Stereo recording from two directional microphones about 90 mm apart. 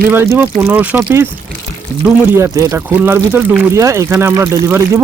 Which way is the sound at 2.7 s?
25° right (ahead or behind).